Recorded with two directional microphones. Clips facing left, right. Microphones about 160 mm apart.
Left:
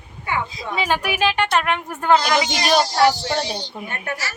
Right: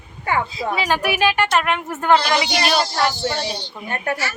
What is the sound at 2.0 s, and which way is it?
Speech, 15° left (ahead or behind).